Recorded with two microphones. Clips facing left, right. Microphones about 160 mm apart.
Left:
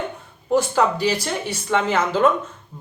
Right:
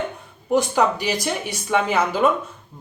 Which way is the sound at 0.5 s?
15° right (ahead or behind).